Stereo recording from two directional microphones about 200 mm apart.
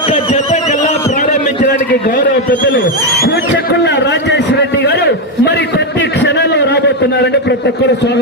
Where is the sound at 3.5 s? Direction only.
60° left (ahead or behind).